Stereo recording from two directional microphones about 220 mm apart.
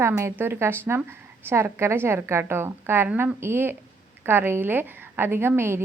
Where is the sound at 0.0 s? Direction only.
10° right (ahead or behind).